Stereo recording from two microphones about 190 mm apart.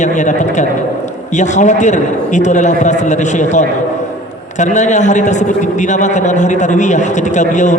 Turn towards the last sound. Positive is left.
turn(degrees=40)  # may be behind; listen again after turning